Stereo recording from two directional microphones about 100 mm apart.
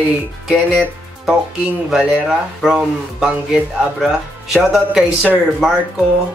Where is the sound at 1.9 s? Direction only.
5° right (ahead or behind).